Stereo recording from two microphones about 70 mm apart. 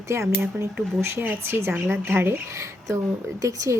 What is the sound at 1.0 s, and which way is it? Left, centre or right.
Speech, right.